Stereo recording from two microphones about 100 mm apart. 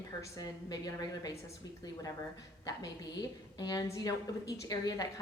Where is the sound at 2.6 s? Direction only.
40° left (ahead or behind).